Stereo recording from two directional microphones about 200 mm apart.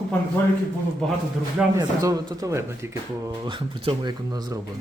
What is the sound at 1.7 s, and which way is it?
A man's voice, 15° right (ahead or behind).